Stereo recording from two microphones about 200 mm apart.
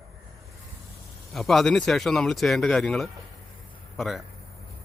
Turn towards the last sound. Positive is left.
turn(degrees=0)  # may be behind; listen again after turning